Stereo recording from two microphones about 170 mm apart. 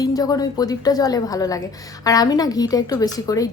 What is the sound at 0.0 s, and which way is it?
A woman's voice, 20° left (ahead or behind).